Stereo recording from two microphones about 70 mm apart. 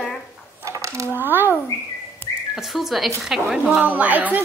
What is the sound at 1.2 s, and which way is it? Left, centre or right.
Speech, right.